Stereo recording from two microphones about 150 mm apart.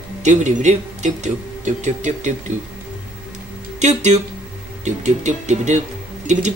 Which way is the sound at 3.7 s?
50° right (ahead or behind).